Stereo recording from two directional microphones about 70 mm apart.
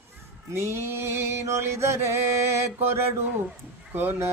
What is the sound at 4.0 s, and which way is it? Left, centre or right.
Speech, right.